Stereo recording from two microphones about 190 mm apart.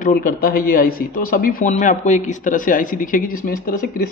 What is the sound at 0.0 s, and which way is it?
Speech, 50° left (ahead or behind).